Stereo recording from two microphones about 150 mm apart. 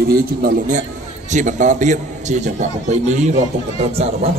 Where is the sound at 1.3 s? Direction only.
55° right (ahead or behind).